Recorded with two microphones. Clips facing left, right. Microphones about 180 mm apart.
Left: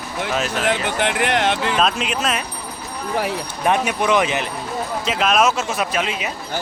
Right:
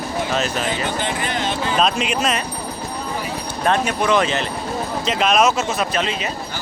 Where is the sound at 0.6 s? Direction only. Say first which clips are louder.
Left 3 dB; 75° left (ahead or behind).